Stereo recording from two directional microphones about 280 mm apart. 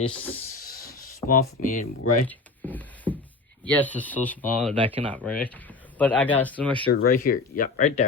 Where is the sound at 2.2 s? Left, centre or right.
Centre.